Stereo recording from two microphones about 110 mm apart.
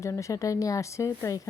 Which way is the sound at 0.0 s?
30° left (ahead or behind).